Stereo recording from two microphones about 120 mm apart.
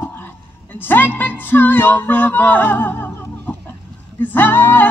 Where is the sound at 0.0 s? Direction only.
20° left (ahead or behind).